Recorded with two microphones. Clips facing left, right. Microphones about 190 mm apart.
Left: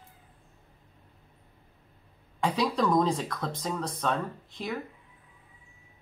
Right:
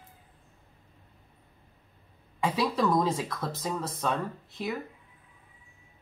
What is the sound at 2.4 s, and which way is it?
Speech, 5° right (ahead or behind).